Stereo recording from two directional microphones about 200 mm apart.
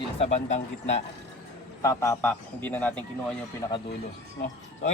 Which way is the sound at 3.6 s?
20° left (ahead or behind).